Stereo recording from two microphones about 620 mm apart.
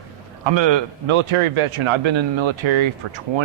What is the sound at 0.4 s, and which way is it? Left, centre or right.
A man's voice, right.